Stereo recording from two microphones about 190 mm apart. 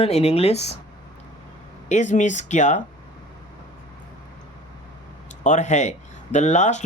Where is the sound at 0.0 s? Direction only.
35° left (ahead or behind).